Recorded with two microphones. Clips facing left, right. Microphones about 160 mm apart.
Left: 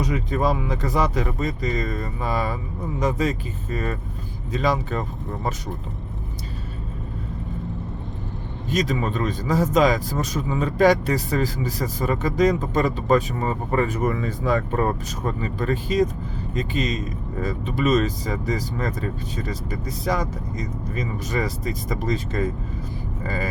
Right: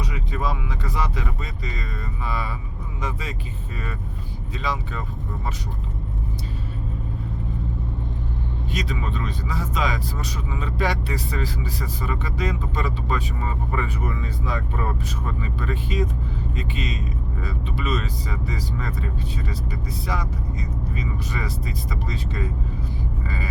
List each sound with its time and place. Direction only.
0.0 s speech: 45° left (ahead or behind)
8.7 s speech: 45° left (ahead or behind)